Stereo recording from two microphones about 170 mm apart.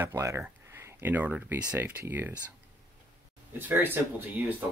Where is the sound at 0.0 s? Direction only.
15° right (ahead or behind).